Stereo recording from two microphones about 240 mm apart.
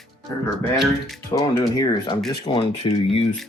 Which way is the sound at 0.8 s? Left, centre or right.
Centre.